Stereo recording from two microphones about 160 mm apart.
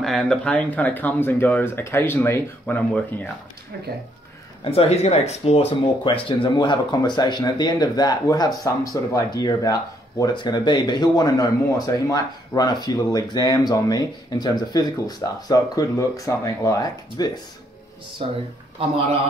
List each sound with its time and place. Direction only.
0.0 s speech: centre (ahead or behind)
4.6 s speech: 40° left (ahead or behind); by 17.3 s 20° left (ahead or behind)
18.2 s speech: 35° right (ahead or behind)